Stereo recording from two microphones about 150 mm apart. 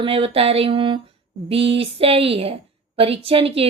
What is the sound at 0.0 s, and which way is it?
A woman's voice, 40° right (ahead or behind).